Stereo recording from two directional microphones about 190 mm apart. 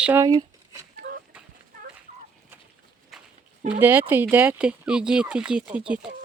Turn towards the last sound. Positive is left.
turn(degrees=-5)  # may be behind; listen again after turning